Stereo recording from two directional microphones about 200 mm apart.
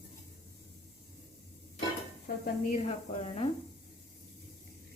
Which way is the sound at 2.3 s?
50° left (ahead or behind).